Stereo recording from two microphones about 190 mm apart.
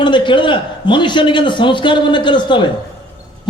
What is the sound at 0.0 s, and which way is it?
A man's voice, 25° left (ahead or behind).